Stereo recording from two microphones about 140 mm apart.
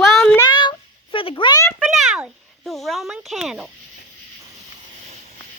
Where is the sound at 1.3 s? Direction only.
30° left (ahead or behind).